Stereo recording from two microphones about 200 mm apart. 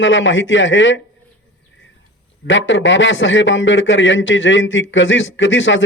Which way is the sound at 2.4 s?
70° left (ahead or behind).